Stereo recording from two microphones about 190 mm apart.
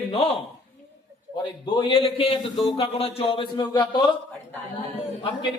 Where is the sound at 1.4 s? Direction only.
25° left (ahead or behind).